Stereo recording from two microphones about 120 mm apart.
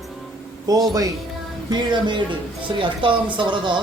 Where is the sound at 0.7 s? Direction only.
30° right (ahead or behind).